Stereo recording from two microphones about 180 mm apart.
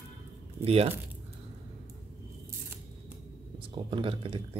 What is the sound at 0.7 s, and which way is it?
Speech, 35° right (ahead or behind).